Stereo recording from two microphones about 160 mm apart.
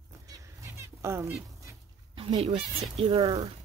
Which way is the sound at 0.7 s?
15° right (ahead or behind).